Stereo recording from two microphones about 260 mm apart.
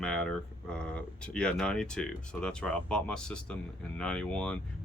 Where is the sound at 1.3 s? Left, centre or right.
Centre.